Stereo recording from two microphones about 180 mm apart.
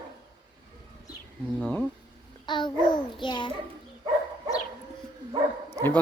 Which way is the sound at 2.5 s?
25° left (ahead or behind).